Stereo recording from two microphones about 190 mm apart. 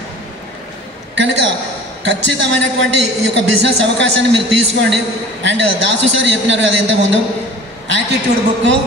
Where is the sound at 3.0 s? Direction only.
70° right (ahead or behind).